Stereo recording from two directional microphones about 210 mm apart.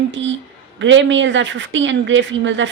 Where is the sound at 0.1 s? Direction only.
60° right (ahead or behind).